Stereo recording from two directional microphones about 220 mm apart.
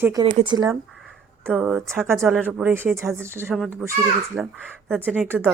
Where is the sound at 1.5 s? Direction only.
5° right (ahead or behind).